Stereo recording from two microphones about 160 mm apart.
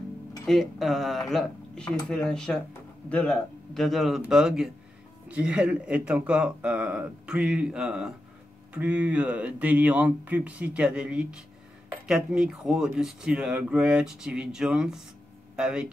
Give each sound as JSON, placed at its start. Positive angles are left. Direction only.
{"t": 0.5, "sound": "speech", "side_deg": 0}